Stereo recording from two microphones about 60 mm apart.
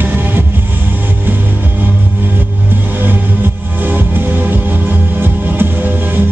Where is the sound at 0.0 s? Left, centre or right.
Right.